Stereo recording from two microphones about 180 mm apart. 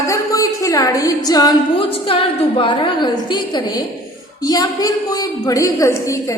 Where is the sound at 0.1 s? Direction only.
20° left (ahead or behind).